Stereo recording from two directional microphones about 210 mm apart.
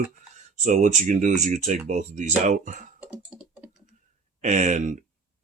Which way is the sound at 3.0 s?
5° right (ahead or behind).